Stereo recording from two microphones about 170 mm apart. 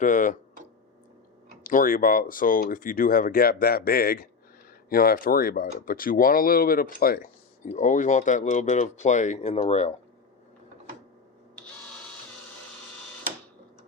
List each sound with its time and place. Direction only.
0.0 s speech: 50° left (ahead or behind)
1.6 s speech: 55° left (ahead or behind)